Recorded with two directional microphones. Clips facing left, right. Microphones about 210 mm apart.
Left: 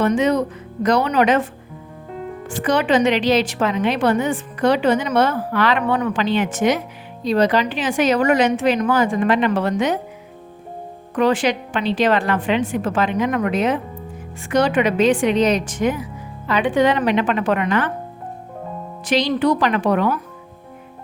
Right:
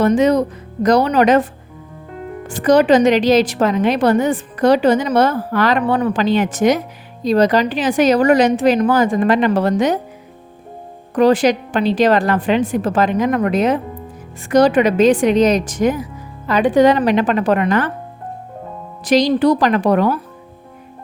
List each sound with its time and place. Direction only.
0.0 s speech: 40° right (ahead or behind)
2.5 s speech: 40° right (ahead or behind)
11.1 s speech: 35° right (ahead or behind)
19.0 s speech: 40° right (ahead or behind)